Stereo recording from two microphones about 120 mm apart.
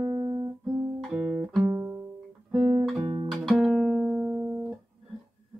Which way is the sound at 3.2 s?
Centre (ahead or behind).